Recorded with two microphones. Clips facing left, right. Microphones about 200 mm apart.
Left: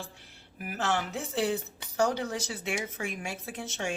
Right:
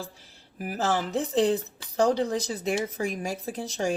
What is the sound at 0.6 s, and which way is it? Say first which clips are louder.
A woman's voice: right 4 dB; 35° right (ahead or behind).